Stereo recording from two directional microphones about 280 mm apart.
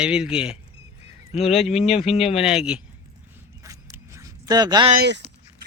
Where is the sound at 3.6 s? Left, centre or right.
Centre.